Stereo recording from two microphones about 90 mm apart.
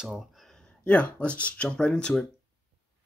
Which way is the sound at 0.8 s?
15° left (ahead or behind).